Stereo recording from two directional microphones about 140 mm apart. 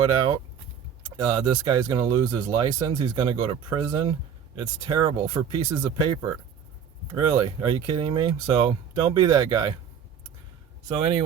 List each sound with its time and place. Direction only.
0.0 s speech: 35° right (ahead or behind)
10.8 s speech: 45° right (ahead or behind)